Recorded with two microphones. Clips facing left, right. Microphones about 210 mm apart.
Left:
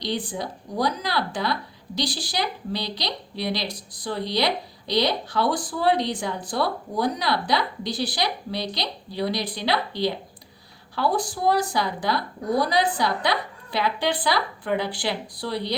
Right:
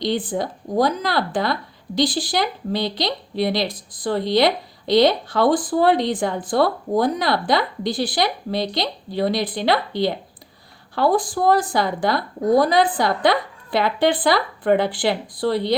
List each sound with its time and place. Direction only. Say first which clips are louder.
0.0 s speech: right 6 dB; 50° right (ahead or behind)